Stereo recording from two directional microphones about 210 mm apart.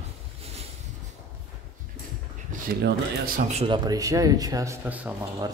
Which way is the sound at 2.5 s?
45° right (ahead or behind).